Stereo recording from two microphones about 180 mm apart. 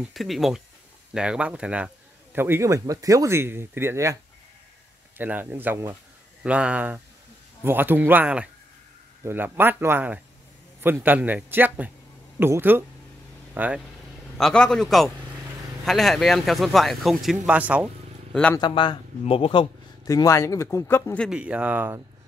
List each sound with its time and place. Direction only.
0.0 s speech: centre (ahead or behind)
14.4 s speech: 5° left (ahead or behind)
18.3 s speech: 5° left (ahead or behind)
18.6 s speech: 25° left (ahead or behind)
20.1 s speech: 15° left (ahead or behind)
21.3 s speech: 5° right (ahead or behind)